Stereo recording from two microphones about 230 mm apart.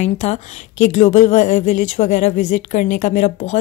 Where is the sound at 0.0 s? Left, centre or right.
Left.